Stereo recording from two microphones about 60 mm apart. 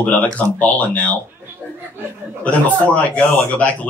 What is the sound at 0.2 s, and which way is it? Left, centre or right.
Speech, left.